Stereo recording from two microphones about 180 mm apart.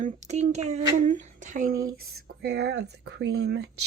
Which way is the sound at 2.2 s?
65° right (ahead or behind).